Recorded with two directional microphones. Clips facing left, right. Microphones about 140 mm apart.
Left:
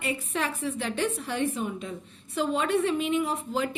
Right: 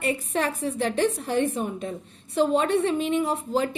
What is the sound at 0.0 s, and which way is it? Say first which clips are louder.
A woman's voice: right 4 dB; 40° right (ahead or behind).